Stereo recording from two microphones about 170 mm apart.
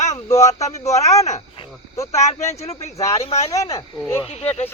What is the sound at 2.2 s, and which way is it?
Speech, 40° left (ahead or behind).